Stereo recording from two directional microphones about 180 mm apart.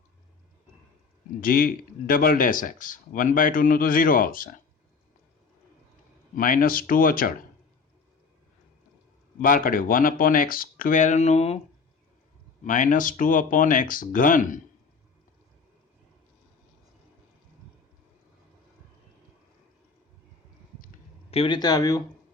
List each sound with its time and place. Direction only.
1.4 s speech: 55° left (ahead or behind)
6.3 s speech: 50° left (ahead or behind)
9.4 s speech: 50° left (ahead or behind)
12.6 s speech: 45° left (ahead or behind)
21.2 s speech: 30° left (ahead or behind)